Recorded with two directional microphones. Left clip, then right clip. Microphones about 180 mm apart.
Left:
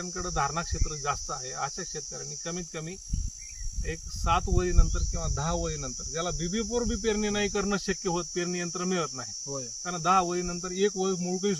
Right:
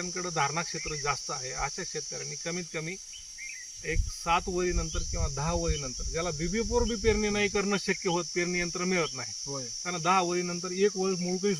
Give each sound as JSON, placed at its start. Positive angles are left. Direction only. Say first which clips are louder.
{"t": 0.2, "sound": "speech", "louder": "even", "side_deg": 15}
{"t": 3.8, "sound": "speech", "louder": "even", "side_deg": 15}
{"t": 7.1, "sound": "speech", "louder": "right 1 dB", "side_deg": 10}